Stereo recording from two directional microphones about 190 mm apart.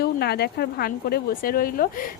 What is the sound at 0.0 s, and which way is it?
Speech, 55° left (ahead or behind).